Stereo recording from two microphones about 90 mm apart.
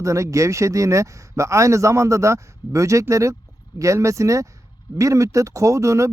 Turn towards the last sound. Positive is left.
turn(degrees=-35)  # may be behind; listen again after turning